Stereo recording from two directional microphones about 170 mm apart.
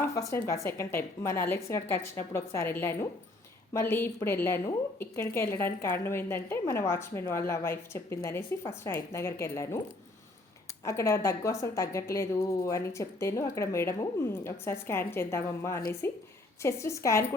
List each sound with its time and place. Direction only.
0.0 s a woman's voice: 20° left (ahead or behind)
10.8 s a woman's voice: 15° left (ahead or behind)